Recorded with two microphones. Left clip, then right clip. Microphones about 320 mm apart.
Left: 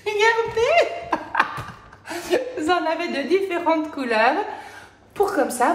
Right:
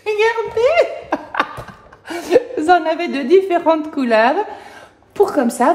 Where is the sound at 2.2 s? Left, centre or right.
Right.